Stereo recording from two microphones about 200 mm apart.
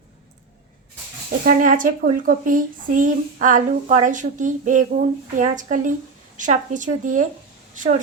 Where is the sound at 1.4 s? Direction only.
40° right (ahead or behind).